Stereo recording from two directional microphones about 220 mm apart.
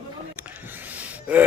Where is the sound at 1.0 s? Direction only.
5° right (ahead or behind).